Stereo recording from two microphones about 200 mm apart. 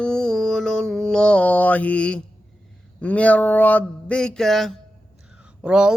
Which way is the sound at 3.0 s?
5° left (ahead or behind).